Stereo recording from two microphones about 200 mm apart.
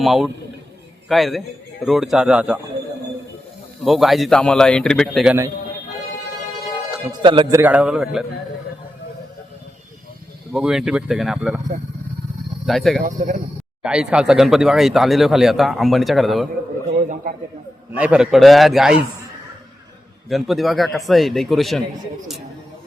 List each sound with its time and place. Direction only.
0.0 s speech: centre (ahead or behind)
3.8 s speech: centre (ahead or behind)
7.1 s a man's voice: 25° right (ahead or behind)
7.6 s speech: 5° right (ahead or behind)
10.5 s speech: centre (ahead or behind)
12.6 s speech: centre (ahead or behind)
13.0 s speech: 40° right (ahead or behind)
13.8 s speech: 5° right (ahead or behind)
17.9 s speech: 5° right (ahead or behind)
20.3 s speech: centre (ahead or behind)